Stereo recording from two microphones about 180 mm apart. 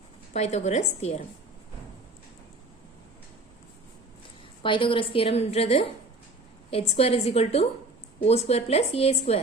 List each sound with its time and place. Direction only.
0.3 s a woman's voice: 35° left (ahead or behind)
4.6 s a woman's voice: 30° left (ahead or behind)